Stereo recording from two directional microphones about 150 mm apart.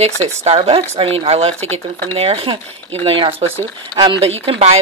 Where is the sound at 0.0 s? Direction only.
45° right (ahead or behind).